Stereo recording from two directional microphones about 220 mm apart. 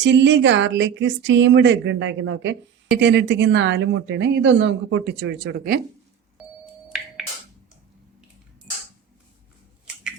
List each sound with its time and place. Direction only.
0.0 s speech: 55° right (ahead or behind)